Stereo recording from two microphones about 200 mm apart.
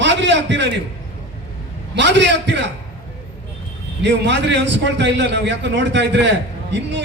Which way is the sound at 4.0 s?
60° right (ahead or behind).